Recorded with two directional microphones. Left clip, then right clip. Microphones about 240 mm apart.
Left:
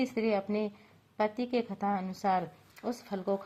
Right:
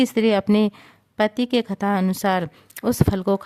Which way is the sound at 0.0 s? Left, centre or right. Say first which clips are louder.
Right 11 dB; right.